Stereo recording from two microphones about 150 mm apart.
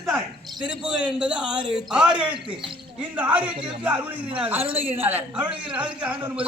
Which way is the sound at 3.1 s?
10° right (ahead or behind).